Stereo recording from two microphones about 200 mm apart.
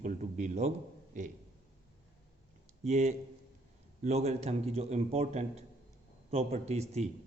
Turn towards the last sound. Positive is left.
turn(degrees=-35)  # may be behind; listen again after turning